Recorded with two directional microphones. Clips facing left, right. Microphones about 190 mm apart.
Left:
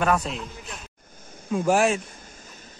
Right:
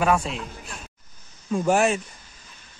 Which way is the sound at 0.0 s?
5° right (ahead or behind).